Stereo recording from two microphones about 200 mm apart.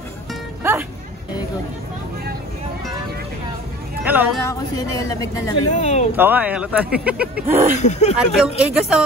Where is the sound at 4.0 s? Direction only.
10° right (ahead or behind).